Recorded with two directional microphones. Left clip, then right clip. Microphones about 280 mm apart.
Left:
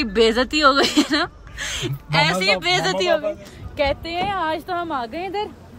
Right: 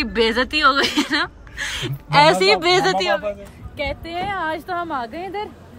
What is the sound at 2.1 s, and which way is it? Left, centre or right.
Speech, centre.